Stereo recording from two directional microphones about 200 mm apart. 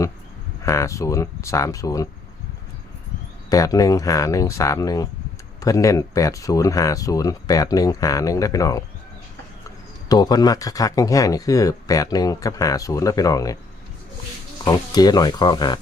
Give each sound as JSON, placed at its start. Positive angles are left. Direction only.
{"t": 0.6, "sound": "speech", "side_deg": 15}
{"t": 3.5, "sound": "speech", "side_deg": 15}
{"t": 10.1, "sound": "speech", "side_deg": 20}
{"t": 14.6, "sound": "speech", "side_deg": 20}